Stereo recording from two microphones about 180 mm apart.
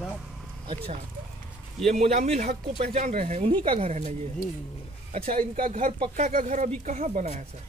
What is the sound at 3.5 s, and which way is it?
Speech, 30° right (ahead or behind).